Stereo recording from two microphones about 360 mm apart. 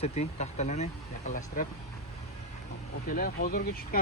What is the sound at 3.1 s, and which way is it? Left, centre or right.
Speech, left.